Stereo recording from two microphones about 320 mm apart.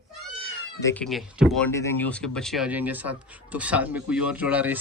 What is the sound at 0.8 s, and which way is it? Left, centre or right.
Speech, centre.